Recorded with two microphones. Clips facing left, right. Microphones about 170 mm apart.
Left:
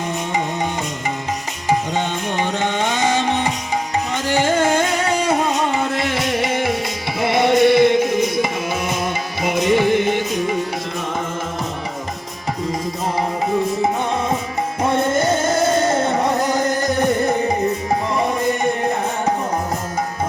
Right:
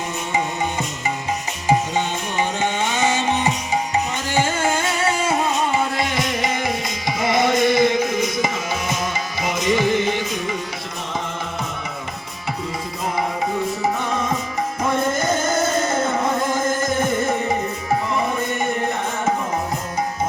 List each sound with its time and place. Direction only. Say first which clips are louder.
4.9 s music: left 2 dB; 40° left (ahead or behind)
6.1 s music: left 3 dB; 65° left (ahead or behind)
14.8 s music: left 4 dB; 30° left (ahead or behind)